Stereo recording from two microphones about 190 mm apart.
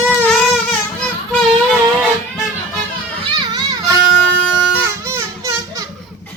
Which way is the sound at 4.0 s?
5° right (ahead or behind).